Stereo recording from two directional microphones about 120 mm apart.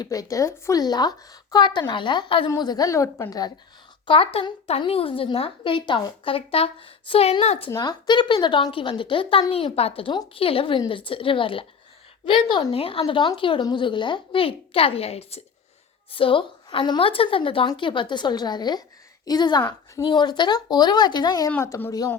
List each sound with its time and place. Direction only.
0.0 s speech: 30° left (ahead or behind)
2.5 s a woman's voice: 35° left (ahead or behind)
4.0 s a woman's voice: 50° left (ahead or behind)
7.7 s a woman's voice: 35° left (ahead or behind); by 15.4 s 60° left (ahead or behind)
16.1 s a woman's voice: 45° left (ahead or behind)
21.6 s a woman's voice: 20° left (ahead or behind)